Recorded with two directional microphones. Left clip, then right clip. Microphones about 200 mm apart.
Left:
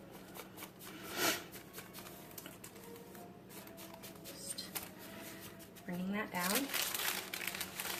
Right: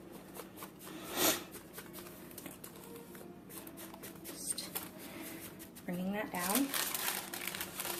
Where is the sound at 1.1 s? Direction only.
25° right (ahead or behind).